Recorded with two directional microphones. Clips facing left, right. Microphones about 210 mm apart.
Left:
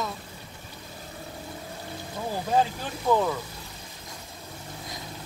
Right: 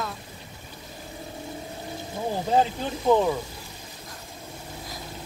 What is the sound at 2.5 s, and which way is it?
Speech, 20° right (ahead or behind).